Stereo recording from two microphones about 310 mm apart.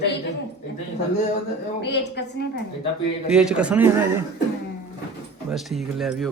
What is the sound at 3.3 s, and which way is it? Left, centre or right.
Speech, centre.